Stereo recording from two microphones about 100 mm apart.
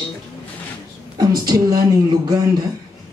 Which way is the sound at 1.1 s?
40° right (ahead or behind).